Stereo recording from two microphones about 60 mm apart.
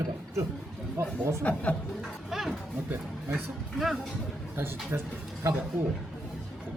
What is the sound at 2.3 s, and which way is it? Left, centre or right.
Speech, centre.